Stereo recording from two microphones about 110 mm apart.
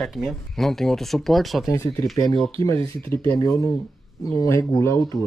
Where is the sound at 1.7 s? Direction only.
25° left (ahead or behind).